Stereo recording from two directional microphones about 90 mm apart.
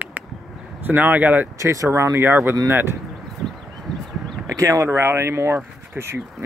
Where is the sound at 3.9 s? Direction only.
5° left (ahead or behind).